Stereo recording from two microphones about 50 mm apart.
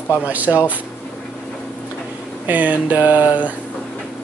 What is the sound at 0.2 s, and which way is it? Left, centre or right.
Speech, right.